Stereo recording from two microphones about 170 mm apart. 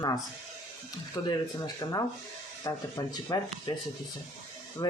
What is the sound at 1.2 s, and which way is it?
Speech, 25° left (ahead or behind).